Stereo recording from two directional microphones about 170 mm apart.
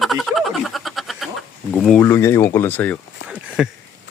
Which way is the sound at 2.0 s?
15° left (ahead or behind).